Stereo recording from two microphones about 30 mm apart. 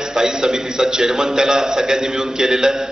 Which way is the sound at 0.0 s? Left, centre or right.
Right.